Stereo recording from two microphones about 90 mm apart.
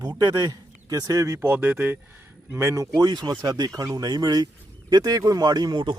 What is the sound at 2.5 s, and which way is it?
A man's voice, 30° right (ahead or behind).